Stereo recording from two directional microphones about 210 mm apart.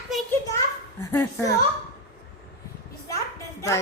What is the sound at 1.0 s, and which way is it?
Speech, 10° left (ahead or behind).